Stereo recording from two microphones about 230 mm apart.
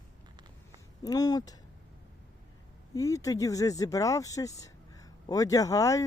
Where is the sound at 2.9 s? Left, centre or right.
Centre.